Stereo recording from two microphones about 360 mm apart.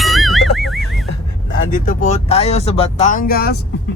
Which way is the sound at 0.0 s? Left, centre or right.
Centre.